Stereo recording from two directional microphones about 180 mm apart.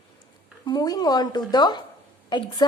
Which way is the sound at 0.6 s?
20° left (ahead or behind).